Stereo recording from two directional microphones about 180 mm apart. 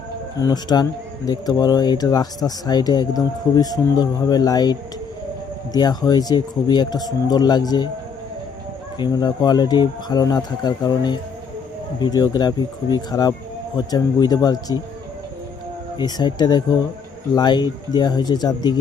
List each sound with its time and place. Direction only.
0.3 s speech: 20° left (ahead or behind)
9.0 s speech: 25° left (ahead or behind)
16.0 s speech: 25° left (ahead or behind)